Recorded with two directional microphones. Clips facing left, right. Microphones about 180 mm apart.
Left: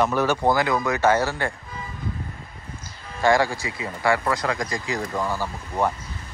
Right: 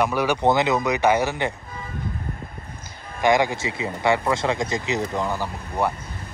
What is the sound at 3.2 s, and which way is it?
Speech, 20° right (ahead or behind).